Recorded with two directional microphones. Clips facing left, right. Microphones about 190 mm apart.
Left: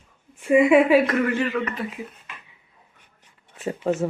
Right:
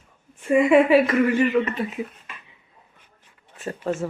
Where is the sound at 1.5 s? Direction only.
25° right (ahead or behind).